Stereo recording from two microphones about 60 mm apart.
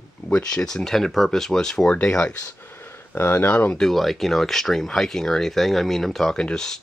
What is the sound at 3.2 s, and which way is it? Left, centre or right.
Speech, left.